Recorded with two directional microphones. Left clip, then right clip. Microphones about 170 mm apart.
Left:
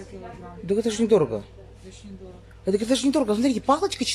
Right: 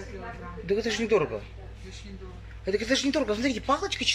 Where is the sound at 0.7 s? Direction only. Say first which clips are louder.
Left 4 dB; 20° left (ahead or behind).